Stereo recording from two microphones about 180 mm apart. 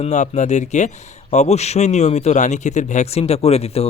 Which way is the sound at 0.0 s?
40° left (ahead or behind).